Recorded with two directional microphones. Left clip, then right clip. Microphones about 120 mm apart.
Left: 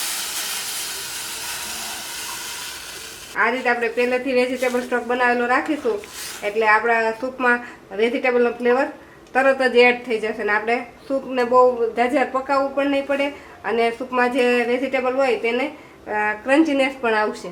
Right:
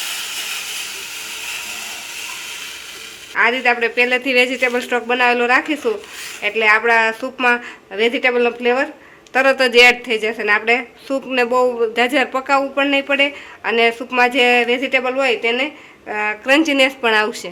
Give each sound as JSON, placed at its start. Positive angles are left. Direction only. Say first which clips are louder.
{"t": 3.3, "sound": "a woman's voice", "louder": "right 4 dB", "side_deg": -30}
{"t": 4.0, "sound": "a woman's voice", "louder": "right 6 dB", "side_deg": -45}